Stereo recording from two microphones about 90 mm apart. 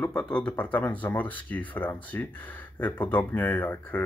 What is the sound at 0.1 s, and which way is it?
Speech, 10° left (ahead or behind).